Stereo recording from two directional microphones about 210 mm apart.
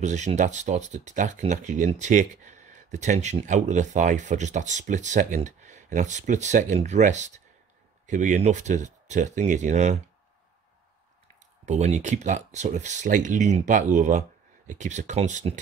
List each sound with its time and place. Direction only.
0.0 s speech: 35° right (ahead or behind)
11.6 s speech: 35° right (ahead or behind)